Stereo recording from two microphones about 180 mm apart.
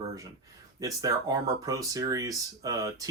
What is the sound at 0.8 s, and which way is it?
Speech, 20° right (ahead or behind).